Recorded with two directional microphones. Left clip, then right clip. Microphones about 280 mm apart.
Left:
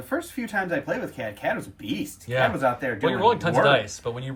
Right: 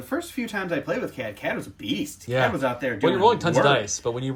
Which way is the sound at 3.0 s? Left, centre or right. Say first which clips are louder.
Right 2 dB; centre.